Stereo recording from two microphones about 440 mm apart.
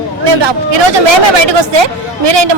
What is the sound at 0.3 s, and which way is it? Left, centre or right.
Speech, right.